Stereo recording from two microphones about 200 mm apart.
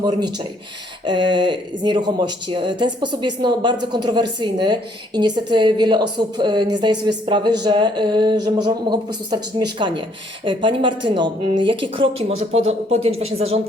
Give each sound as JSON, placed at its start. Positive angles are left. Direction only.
{"t": 0.0, "sound": "speech", "side_deg": -20}